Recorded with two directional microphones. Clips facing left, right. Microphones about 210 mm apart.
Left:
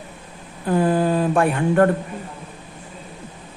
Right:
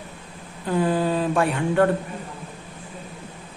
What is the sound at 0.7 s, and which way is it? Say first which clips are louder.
Mantra: left 3 dB; 55° left (ahead or behind).